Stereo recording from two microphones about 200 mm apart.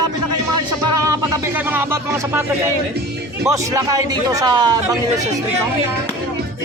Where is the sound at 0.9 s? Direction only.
15° right (ahead or behind).